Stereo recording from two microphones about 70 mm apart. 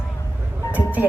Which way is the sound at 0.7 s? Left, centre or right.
Right.